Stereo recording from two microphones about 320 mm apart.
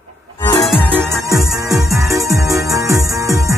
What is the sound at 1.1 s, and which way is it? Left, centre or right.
Music, centre.